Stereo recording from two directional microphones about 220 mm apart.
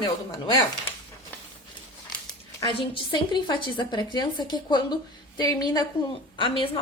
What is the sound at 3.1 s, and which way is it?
A woman's voice, 20° left (ahead or behind).